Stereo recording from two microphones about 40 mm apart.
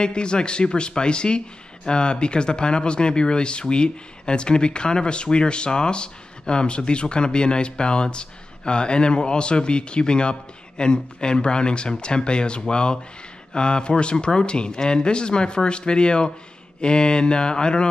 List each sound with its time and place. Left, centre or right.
0.0 s speech: left